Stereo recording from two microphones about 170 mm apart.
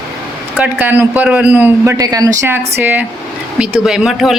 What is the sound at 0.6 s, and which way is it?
A man's voice, 10° right (ahead or behind).